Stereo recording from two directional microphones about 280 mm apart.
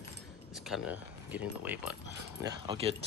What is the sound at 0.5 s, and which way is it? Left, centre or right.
Speech, centre.